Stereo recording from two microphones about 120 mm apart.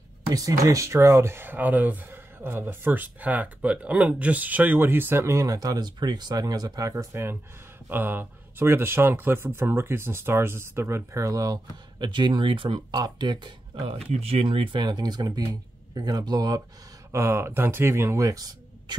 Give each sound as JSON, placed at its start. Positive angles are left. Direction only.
{"t": 0.3, "sound": "speech", "side_deg": -30}
{"t": 17.1, "sound": "speech", "side_deg": -20}